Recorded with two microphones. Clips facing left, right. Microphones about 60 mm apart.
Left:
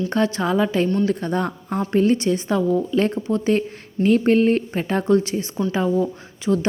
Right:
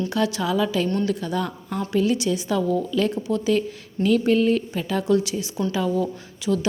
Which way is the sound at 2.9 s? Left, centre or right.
Left.